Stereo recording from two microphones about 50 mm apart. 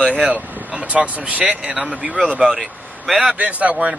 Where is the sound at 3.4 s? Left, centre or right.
Right.